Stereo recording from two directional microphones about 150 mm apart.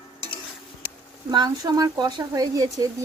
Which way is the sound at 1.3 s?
25° right (ahead or behind).